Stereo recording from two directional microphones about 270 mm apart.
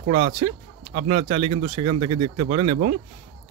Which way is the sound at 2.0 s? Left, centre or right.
Right.